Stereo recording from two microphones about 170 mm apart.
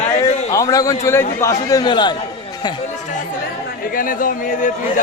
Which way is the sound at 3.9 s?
55° left (ahead or behind).